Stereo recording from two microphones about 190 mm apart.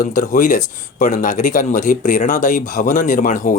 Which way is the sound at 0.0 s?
45° left (ahead or behind).